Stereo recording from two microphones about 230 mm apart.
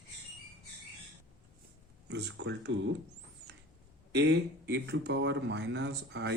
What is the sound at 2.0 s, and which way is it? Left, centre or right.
Speech, right.